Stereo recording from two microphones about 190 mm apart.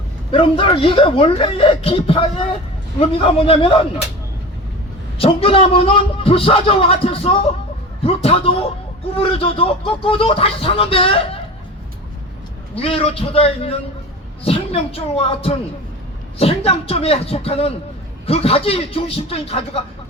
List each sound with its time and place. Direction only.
0.3 s speech: 30° left (ahead or behind)
5.1 s speech: 30° left (ahead or behind)
12.7 s speech: 30° left (ahead or behind)